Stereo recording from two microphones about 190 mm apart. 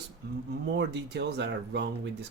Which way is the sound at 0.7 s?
65° right (ahead or behind).